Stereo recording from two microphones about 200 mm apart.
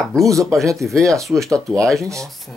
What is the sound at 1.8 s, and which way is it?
Speech, centre (ahead or behind).